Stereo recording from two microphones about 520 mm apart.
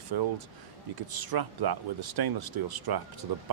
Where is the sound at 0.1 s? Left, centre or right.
Right.